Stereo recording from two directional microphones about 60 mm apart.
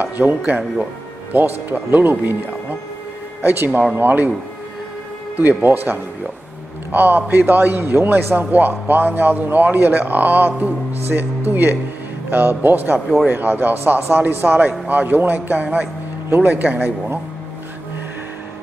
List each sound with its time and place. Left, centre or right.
0.0 s a sound: right
0.5 s a man's voice: centre
1.3 s a man's voice: right
5.3 s a man's voice: right